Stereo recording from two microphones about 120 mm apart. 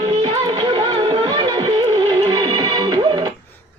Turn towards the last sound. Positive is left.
turn(degrees=-40)  # may be behind; listen again after turning